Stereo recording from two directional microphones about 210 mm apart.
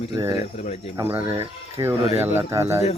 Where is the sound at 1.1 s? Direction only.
10° right (ahead or behind).